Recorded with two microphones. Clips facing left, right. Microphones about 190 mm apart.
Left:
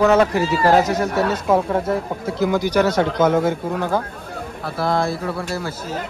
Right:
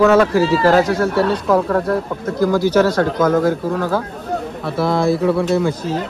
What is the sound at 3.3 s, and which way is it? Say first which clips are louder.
Speech: right 3 dB; 15° left (ahead or behind).